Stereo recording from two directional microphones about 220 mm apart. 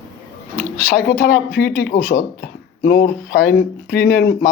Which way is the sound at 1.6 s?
40° left (ahead or behind).